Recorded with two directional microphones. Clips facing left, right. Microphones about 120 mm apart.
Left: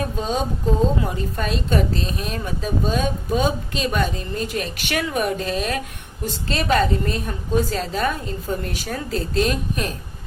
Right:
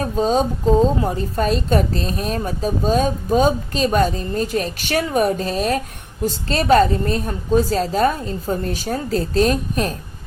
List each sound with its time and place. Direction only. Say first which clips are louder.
0.2 s a woman's voice: right 10 dB; 35° right (ahead or behind)